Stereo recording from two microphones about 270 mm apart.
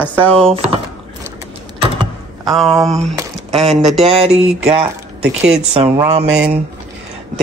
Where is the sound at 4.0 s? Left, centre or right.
Right.